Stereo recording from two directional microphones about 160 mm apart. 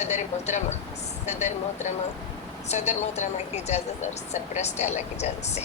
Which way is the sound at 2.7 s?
45° left (ahead or behind).